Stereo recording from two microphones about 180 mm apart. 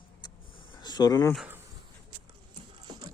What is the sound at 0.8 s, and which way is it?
Insect, 25° left (ahead or behind).